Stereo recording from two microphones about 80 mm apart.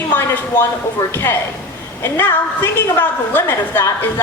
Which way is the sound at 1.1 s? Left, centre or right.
Left.